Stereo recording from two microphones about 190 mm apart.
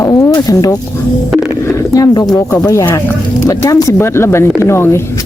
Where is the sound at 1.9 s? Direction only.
20° left (ahead or behind).